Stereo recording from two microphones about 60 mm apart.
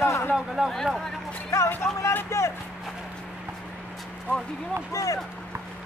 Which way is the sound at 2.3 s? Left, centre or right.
Left.